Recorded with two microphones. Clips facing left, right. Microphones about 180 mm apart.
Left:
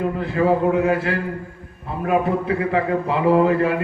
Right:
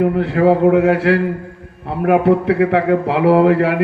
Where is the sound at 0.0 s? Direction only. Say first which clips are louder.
Right 6 dB; 80° right.